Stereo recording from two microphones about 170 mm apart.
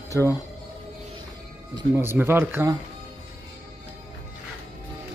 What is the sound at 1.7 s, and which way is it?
Speech, 15° right (ahead or behind).